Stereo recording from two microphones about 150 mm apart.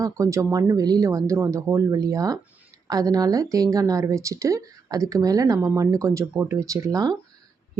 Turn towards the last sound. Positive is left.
turn(degrees=-25)  # may be behind; listen again after turning